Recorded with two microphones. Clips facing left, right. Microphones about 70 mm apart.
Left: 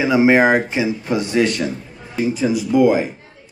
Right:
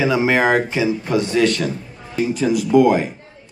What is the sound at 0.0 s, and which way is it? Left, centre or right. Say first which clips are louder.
Speech: left 3 dB; left.